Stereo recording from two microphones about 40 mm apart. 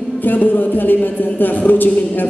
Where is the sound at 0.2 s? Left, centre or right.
Left.